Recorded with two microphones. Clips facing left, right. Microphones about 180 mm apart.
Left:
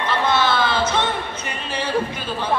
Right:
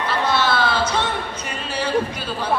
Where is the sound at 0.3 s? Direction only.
10° right (ahead or behind).